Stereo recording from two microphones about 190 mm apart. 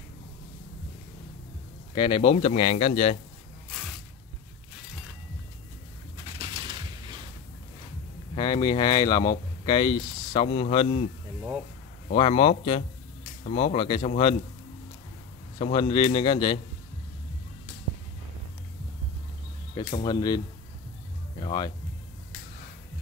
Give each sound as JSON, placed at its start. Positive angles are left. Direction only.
{"t": 2.0, "sound": "speech", "side_deg": 30}
{"t": 8.4, "sound": "speech", "side_deg": 20}
{"t": 12.2, "sound": "speech", "side_deg": 30}
{"t": 15.6, "sound": "speech", "side_deg": 25}
{"t": 19.7, "sound": "speech", "side_deg": 25}